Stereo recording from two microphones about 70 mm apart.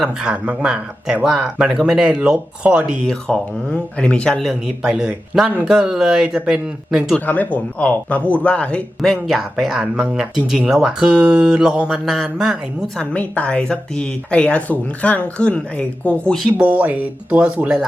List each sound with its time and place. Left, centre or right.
0.0 s speech: centre
3.2 s speech: centre
4.4 s speech: centre
7.3 s speech: left
9.0 s speech: centre
12.0 s speech: centre
13.0 s speech: centre
16.6 s speech: right